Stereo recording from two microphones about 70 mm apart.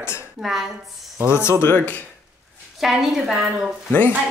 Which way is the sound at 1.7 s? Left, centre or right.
Left.